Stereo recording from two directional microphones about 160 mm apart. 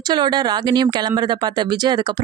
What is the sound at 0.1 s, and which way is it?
Speech, 25° right (ahead or behind).